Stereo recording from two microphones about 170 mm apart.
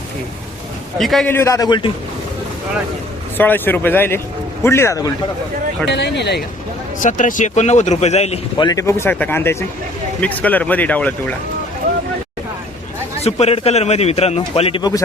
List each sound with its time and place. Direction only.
0.9 s a man's voice: centre (ahead or behind)
1.3 s a man's voice: 15° left (ahead or behind)
3.3 s speech: 10° left (ahead or behind)
5.9 s speech: 90° left
7.0 s speech: 50° left (ahead or behind)
8.5 s speech: 25° left (ahead or behind)
13.2 s speech: 40° left (ahead or behind)